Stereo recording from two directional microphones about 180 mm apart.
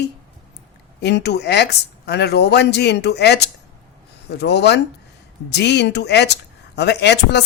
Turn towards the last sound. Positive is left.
turn(degrees=70)  # may be behind; listen again after turning